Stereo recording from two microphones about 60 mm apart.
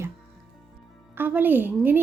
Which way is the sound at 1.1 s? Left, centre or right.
Right.